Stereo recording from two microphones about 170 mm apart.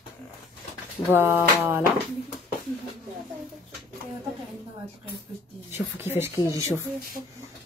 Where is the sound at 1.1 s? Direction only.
10° right (ahead or behind).